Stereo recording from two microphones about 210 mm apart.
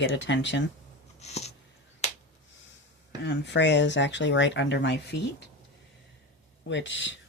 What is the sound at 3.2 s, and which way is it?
Speech, 55° left (ahead or behind).